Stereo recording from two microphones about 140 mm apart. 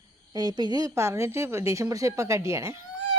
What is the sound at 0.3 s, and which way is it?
A woman's voice, 30° right (ahead or behind).